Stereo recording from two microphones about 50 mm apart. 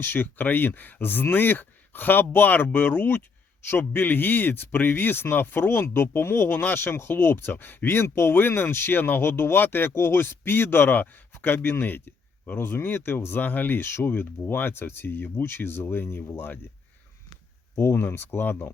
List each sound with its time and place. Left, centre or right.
0.0 s speech: left
6.5 s speech: left
13.8 s speech: left
17.7 s speech: left